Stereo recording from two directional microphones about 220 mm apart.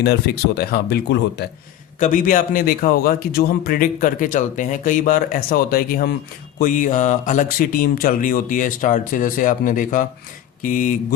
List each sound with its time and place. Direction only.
0.0 s speech: 45° left (ahead or behind)
2.0 s speech: 35° left (ahead or behind)